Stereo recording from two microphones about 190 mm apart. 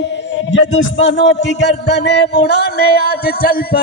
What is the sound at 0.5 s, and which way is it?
A man's voice, 75° left (ahead or behind).